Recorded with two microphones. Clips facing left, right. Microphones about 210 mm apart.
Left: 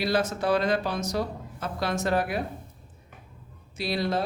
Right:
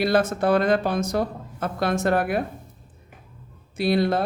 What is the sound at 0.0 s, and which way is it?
Speech, 55° right (ahead or behind).